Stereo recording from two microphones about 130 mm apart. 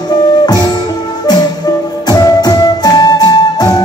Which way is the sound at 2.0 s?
30° left (ahead or behind).